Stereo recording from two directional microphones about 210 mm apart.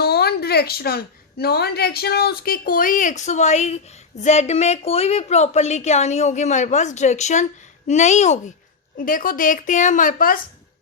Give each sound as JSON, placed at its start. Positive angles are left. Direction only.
{"t": 0.0, "sound": "a woman's voice", "side_deg": 50}